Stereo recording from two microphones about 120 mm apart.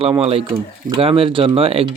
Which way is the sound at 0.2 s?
50° right (ahead or behind).